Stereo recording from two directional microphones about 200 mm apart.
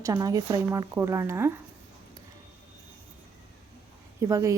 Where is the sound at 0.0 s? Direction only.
15° right (ahead or behind).